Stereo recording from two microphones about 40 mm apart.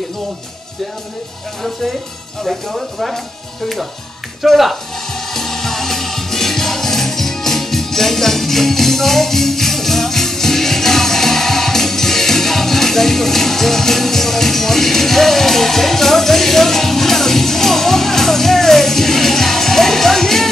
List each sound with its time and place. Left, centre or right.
2.4 s speech: centre
4.4 s speech: centre
5.3 s music: centre